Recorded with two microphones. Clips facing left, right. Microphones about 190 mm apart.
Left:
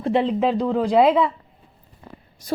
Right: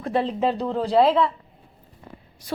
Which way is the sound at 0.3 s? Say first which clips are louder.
Left 3 dB; 10° left (ahead or behind).